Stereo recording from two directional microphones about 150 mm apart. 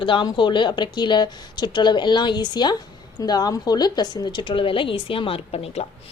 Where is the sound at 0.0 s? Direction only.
35° left (ahead or behind).